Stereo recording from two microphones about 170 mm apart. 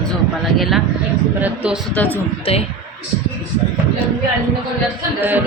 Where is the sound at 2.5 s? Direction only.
35° left (ahead or behind).